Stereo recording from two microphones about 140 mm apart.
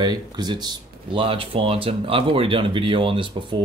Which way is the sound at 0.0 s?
30° right (ahead or behind).